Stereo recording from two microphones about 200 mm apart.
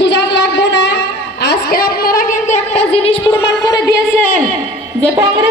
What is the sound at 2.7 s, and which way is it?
A woman's voice, 30° left (ahead or behind).